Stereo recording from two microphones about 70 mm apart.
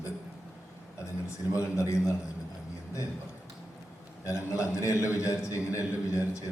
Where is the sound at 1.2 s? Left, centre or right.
Left.